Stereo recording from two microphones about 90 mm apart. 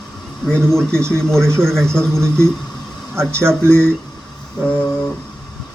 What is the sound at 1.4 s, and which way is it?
Speech, 30° right (ahead or behind).